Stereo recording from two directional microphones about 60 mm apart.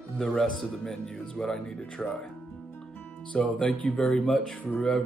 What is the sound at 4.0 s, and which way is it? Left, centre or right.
Speech, centre.